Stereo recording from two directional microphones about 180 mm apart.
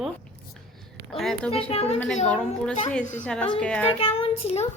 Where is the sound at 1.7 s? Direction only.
35° left (ahead or behind).